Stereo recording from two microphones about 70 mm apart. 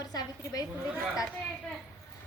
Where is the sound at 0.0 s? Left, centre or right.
Left.